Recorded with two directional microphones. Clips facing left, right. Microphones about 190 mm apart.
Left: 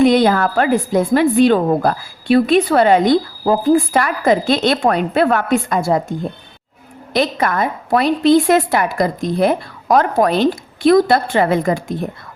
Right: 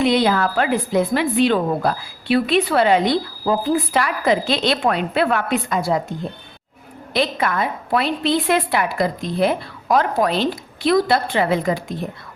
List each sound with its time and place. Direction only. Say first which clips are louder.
0.0 s a woman's voice: left 5 dB; 45° left (ahead or behind)
7.1 s a woman's voice: left 3 dB; 45° left (ahead or behind)